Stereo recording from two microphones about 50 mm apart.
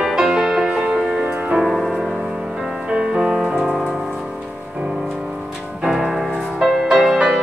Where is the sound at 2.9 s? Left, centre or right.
Centre.